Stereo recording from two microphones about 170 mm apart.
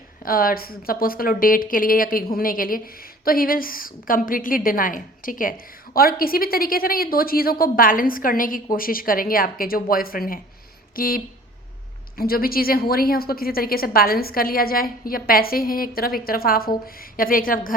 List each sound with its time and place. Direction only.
0.2 s speech: 55° left (ahead or behind)